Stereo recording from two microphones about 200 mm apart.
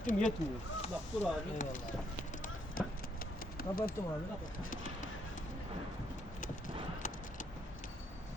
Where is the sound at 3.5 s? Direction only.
45° left (ahead or behind).